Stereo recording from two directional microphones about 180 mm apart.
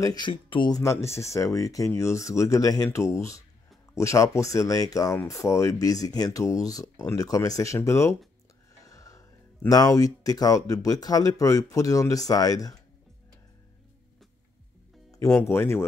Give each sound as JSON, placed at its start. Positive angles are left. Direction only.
{"t": 0.0, "sound": "speech", "side_deg": 25}
{"t": 15.0, "sound": "speech", "side_deg": 15}